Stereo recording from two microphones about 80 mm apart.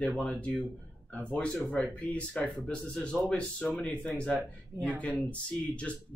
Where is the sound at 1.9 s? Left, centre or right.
Centre.